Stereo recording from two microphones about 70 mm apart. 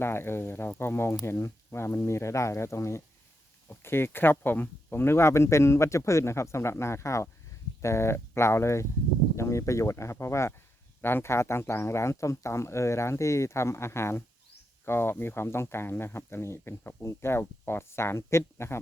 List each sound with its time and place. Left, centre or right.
0.0 s speech: left